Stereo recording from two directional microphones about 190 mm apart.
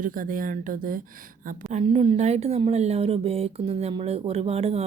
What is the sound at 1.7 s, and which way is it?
Speech, 30° right (ahead or behind).